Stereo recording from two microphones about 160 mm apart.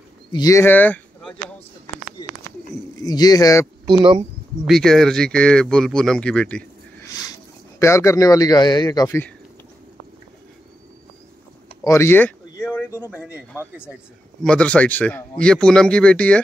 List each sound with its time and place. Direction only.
0.3 s speech: 20° left (ahead or behind)
2.2 s a sound: 25° left (ahead or behind)
3.0 s a man's voice: 25° left (ahead or behind)
4.6 s speech: 5° left (ahead or behind)
7.1 s a sound: 20° left (ahead or behind)
7.8 s a man's voice: 20° left (ahead or behind)
11.8 s a man's voice: 15° left (ahead or behind)
12.6 s a sound: 15° left (ahead or behind)
12.9 s a man's voice: 10° right (ahead or behind)
14.4 s a man's voice: 5° left (ahead or behind)